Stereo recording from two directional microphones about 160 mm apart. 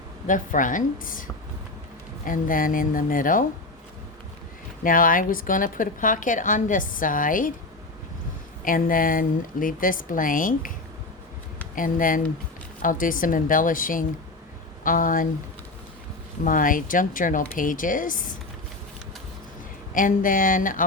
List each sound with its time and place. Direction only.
0.3 s a woman's voice: 55° left (ahead or behind)
2.2 s a woman's voice: 60° left (ahead or behind)
4.8 s a woman's voice: 60° left (ahead or behind)
8.6 s a woman's voice: 60° left (ahead or behind)
11.7 s a woman's voice: 55° left (ahead or behind)
16.4 s a woman's voice: 60° left (ahead or behind)
19.9 s a woman's voice: 55° left (ahead or behind)